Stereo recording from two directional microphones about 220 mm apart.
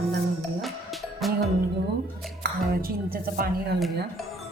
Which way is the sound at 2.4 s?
40° right (ahead or behind).